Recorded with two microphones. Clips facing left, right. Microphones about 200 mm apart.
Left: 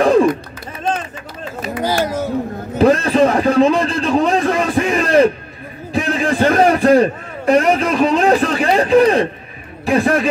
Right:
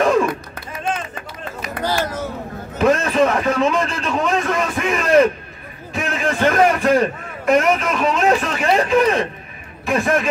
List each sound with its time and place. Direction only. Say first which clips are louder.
0.0 s music: left 4 dB; 35° left (ahead or behind)
1.8 s a sound: left 3 dB; 10° left (ahead or behind)
2.8 s a man's voice: left 4 dB; 35° left (ahead or behind)